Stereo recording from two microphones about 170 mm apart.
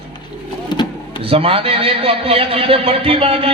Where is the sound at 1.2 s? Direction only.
35° right (ahead or behind).